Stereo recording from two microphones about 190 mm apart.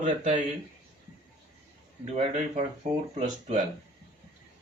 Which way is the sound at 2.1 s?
35° right (ahead or behind).